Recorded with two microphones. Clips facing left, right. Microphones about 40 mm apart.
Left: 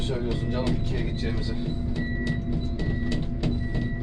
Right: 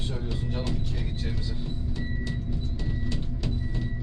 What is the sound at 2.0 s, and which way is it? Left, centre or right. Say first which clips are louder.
Music: left 6 dB; left.